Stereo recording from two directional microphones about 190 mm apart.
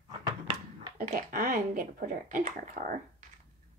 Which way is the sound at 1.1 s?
50° right (ahead or behind).